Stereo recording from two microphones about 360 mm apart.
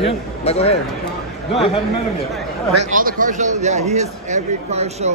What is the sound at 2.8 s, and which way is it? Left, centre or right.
A man's voice, right.